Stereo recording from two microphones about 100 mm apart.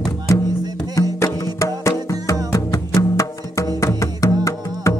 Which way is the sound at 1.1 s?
35° left (ahead or behind).